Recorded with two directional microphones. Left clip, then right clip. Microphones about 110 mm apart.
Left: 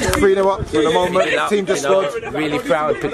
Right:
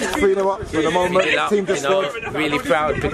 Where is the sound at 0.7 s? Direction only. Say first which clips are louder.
Left 1 dB; 45° left (ahead or behind).